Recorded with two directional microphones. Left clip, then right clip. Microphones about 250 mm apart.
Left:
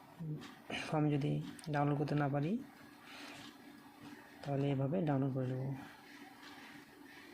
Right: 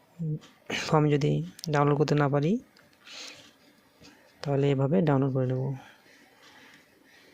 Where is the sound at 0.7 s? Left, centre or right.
Right.